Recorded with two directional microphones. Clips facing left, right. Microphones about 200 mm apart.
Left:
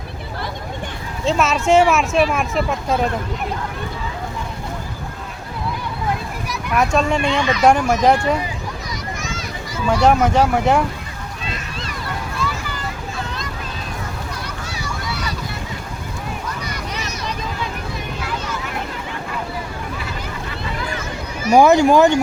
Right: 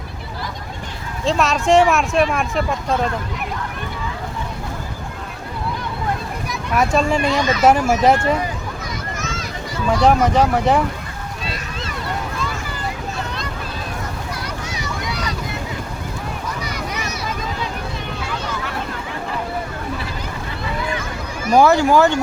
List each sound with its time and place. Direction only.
1.2 s speech: centre (ahead or behind)
6.5 s a child's voice: centre (ahead or behind)
7.2 s speech: 40° right (ahead or behind)
7.6 s speech: 5° right (ahead or behind)
9.4 s speech: centre (ahead or behind)
21.5 s speech: 15° left (ahead or behind)